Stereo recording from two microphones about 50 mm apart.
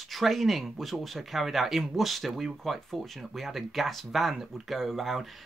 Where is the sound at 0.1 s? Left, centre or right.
Centre.